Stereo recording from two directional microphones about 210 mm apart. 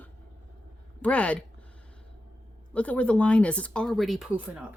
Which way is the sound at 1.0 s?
5° left (ahead or behind).